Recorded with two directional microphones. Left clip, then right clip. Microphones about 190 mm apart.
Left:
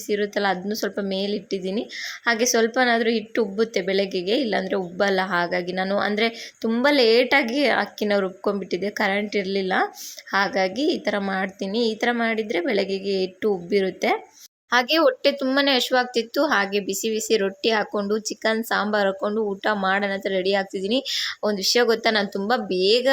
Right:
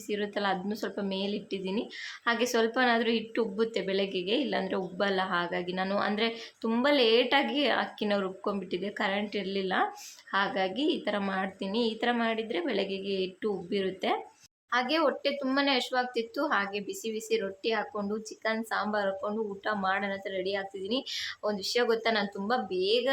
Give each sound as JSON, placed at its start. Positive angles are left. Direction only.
{"t": 0.1, "sound": "speech", "side_deg": 30}